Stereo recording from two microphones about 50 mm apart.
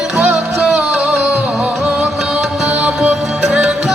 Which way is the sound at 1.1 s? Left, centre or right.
Right.